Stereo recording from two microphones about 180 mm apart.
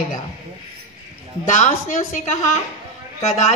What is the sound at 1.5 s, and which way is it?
A woman's voice, 40° left (ahead or behind).